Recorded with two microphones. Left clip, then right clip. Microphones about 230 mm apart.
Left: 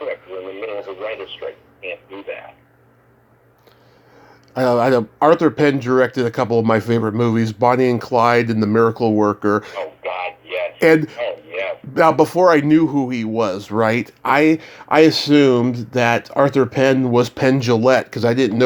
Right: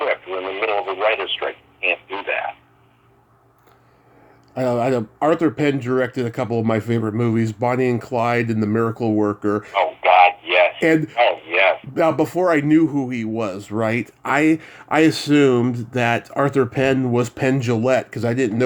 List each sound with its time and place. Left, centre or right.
0.0 s radio: right
4.5 s speech: centre
9.8 s a sound: right
10.8 s a man's voice: centre
11.2 s radio: right
11.9 s speech: centre